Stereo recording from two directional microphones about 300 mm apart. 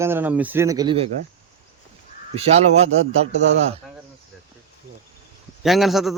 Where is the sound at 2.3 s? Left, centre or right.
Right.